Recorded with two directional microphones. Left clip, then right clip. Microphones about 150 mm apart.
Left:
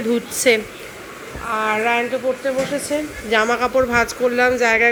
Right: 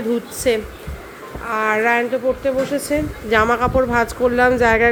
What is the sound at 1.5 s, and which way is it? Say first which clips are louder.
Speech: right 2 dB; 35° right (ahead or behind).